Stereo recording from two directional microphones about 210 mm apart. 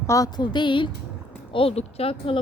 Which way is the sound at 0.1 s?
15° left (ahead or behind).